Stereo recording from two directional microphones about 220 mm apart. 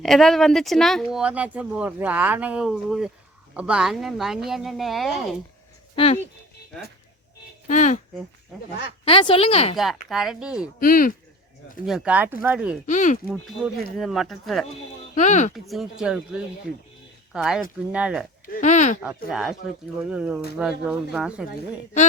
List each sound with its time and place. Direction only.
0.0 s speech: centre (ahead or behind)
6.0 s speech: 25° left (ahead or behind)
7.7 s speech: 35° left (ahead or behind)
9.0 s speech: 25° left (ahead or behind)
9.7 s speech: centre (ahead or behind)
10.8 s speech: 40° left (ahead or behind)
11.9 s speech: 5° right (ahead or behind)
12.8 s speech: 35° left (ahead or behind)
13.4 s speech: centre (ahead or behind)
15.1 s speech: 35° left (ahead or behind)
15.5 s speech: centre (ahead or behind)
18.4 s speech: 35° left (ahead or behind)
19.0 s speech: centre (ahead or behind)